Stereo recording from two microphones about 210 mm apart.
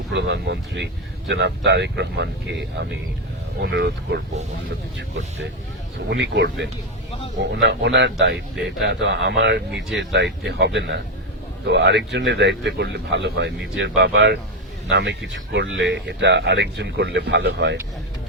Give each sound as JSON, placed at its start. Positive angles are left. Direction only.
{"t": 0.1, "sound": "speech", "side_deg": -55}
{"t": 6.1, "sound": "speech", "side_deg": -55}